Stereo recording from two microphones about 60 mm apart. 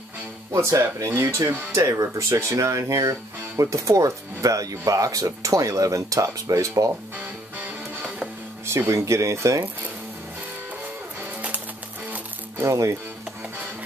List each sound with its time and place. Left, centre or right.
0.5 s speech: right
8.6 s speech: right
12.6 s speech: right